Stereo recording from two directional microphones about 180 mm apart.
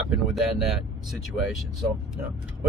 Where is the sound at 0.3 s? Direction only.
Centre (ahead or behind).